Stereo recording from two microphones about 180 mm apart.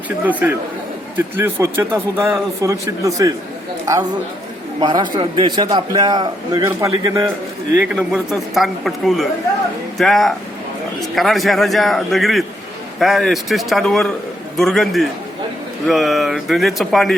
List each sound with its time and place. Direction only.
0.3 s speech: 10° right (ahead or behind)
4.8 s a man's voice: 25° right (ahead or behind)
7.8 s a man's voice: 5° right (ahead or behind)